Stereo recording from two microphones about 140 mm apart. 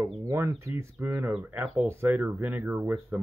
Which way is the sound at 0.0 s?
20° right (ahead or behind).